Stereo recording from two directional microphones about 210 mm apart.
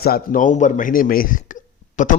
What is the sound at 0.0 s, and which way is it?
A man's voice, 45° left (ahead or behind).